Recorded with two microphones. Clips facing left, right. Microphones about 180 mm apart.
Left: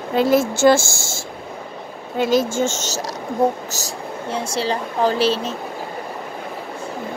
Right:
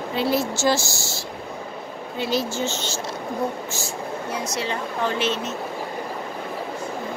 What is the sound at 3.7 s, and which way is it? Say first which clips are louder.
Speech: even; 35° left (ahead or behind).